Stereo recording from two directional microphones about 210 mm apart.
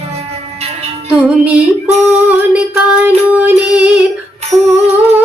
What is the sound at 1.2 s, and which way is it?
Female singing, 5° right (ahead or behind).